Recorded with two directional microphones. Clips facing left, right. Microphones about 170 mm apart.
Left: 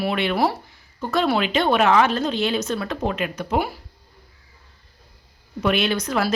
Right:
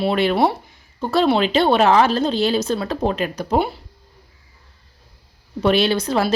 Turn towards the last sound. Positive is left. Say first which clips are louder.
# right 4 dB
turn(degrees=-30)  # may be behind; listen again after turning